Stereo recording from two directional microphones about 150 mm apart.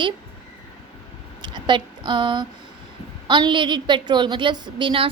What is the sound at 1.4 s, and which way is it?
A woman's voice, 30° right (ahead or behind).